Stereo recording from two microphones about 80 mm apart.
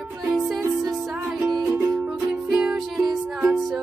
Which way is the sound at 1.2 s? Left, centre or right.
Centre.